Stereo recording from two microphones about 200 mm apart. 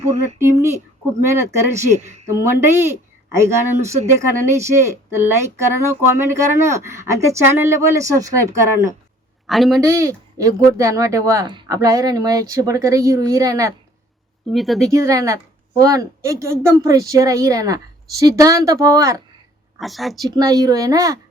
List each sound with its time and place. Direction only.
0.3 s speech: 15° right (ahead or behind)
9.5 s a woman's voice: centre (ahead or behind)
9.8 s speech: 15° right (ahead or behind)
14.5 s a woman's voice: centre (ahead or behind)
14.9 s speech: 15° right (ahead or behind)
19.8 s a woman's voice: centre (ahead or behind)
20.3 s speech: 20° right (ahead or behind)